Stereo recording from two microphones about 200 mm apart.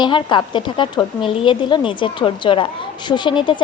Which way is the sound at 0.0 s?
25° left (ahead or behind).